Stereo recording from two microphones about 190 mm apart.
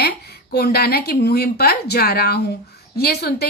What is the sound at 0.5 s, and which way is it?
A woman's voice, 55° left (ahead or behind).